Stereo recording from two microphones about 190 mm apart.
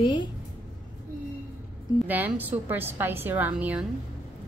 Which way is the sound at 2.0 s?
10° right (ahead or behind).